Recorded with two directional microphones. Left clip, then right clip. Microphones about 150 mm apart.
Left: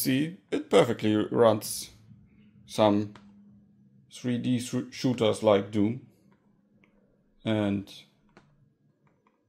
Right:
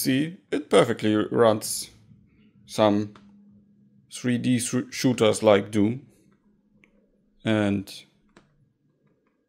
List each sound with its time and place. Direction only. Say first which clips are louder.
0.0 s speech: right 3 dB; 20° right (ahead or behind)
4.1 s speech: right 5 dB; 40° right (ahead or behind)
7.4 s a sound: right 4 dB; 35° right (ahead or behind)